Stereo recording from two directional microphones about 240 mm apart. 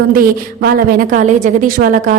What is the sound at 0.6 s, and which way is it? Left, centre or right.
A woman's voice, right.